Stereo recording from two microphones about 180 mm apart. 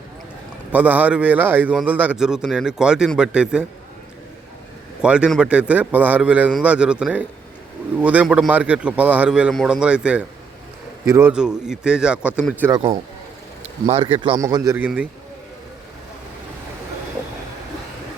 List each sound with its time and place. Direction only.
0.7 s speech: 10° right (ahead or behind)
5.0 s a man's voice: 5° right (ahead or behind)
12.7 s speech: 25° right (ahead or behind)
14.3 s a man's voice: 20° right (ahead or behind)